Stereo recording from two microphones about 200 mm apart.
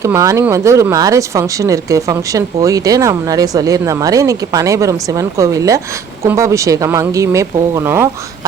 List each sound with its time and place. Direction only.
0.0 s speech: 15° right (ahead or behind)